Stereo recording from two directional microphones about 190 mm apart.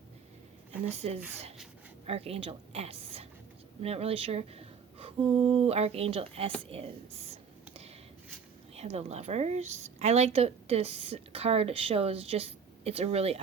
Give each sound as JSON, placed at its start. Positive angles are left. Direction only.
{"t": 0.9, "sound": "a woman's voice", "side_deg": -35}
{"t": 8.7, "sound": "a woman's voice", "side_deg": -35}